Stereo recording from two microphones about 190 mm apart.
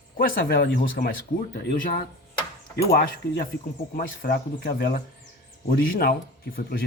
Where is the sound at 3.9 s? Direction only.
50° left (ahead or behind).